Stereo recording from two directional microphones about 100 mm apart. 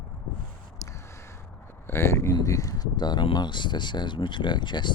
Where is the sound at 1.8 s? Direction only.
25° left (ahead or behind); by 4.9 s 50° left (ahead or behind).